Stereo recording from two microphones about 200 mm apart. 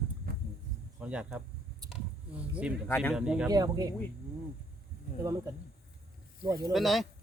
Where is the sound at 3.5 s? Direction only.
20° right (ahead or behind).